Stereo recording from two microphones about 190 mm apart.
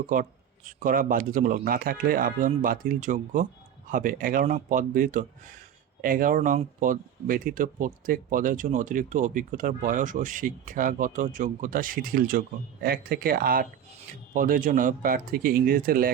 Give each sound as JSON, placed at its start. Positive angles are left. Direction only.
{"t": 0.1, "sound": "speech", "side_deg": -45}